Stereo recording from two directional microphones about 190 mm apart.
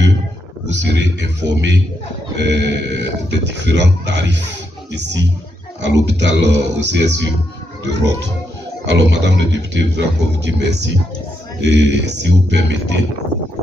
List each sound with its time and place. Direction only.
0.7 s speech: 70° right (ahead or behind)
1.4 s a man's voice: 20° right (ahead or behind)
2.3 s a man's voice: 65° right (ahead or behind)